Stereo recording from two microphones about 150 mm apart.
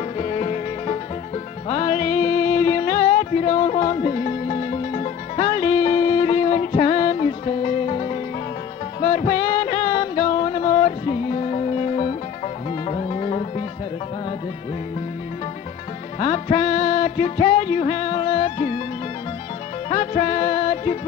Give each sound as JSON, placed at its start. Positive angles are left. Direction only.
{"t": 0.2, "sound": "music", "side_deg": 40}
{"t": 16.2, "sound": "music", "side_deg": 40}
{"t": 19.9, "sound": "music", "side_deg": 40}